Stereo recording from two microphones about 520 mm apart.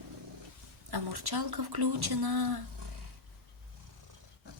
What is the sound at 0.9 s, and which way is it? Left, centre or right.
Speech, right.